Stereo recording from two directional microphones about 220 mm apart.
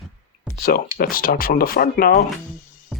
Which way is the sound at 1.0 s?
40° left (ahead or behind).